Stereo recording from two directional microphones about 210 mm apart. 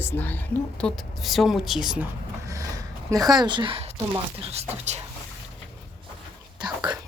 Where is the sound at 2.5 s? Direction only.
15° right (ahead or behind).